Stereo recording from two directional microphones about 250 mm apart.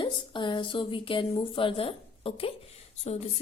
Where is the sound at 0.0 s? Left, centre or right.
Centre.